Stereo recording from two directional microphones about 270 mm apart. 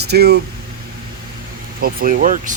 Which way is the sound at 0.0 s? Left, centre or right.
Right.